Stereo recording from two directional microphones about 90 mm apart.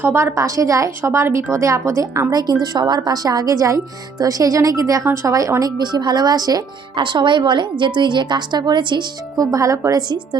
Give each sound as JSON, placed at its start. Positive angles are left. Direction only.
{"t": 0.0, "sound": "a woman's voice", "side_deg": -25}
{"t": 2.3, "sound": "a woman's voice", "side_deg": -50}
{"t": 5.8, "sound": "a woman's voice", "side_deg": -50}
{"t": 6.9, "sound": "a woman's voice", "side_deg": -60}
{"t": 9.4, "sound": "a woman's voice", "side_deg": -40}